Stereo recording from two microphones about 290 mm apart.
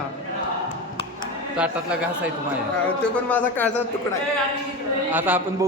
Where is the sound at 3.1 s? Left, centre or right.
Centre.